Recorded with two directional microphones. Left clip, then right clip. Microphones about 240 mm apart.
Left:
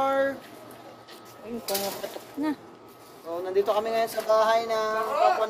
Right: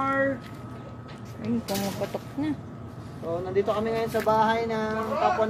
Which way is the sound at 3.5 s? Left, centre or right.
Left.